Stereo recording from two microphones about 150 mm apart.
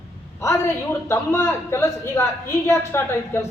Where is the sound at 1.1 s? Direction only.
15° left (ahead or behind).